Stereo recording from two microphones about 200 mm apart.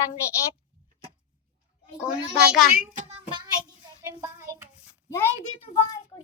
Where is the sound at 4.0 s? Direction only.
15° right (ahead or behind).